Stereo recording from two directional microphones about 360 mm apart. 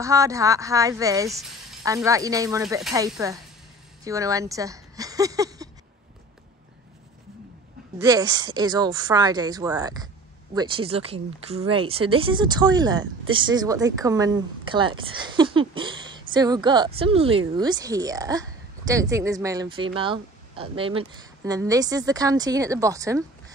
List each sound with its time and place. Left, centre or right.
0.0 s speech: centre
8.0 s speech: centre